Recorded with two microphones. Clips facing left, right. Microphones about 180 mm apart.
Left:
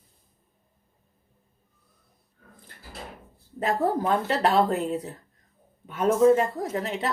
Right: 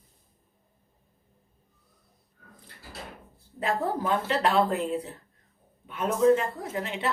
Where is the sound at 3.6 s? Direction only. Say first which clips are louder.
Left 3 dB; 40° left (ahead or behind).